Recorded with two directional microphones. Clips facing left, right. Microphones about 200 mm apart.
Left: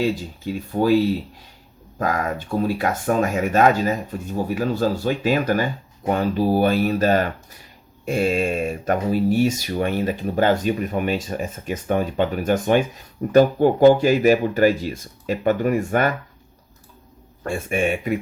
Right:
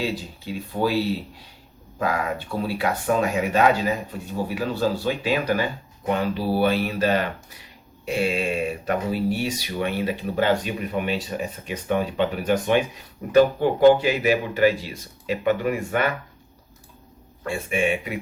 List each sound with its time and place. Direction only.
0.0 s speech: 45° left (ahead or behind)
2.6 s speech: 45° left (ahead or behind)
17.4 s speech: 45° left (ahead or behind)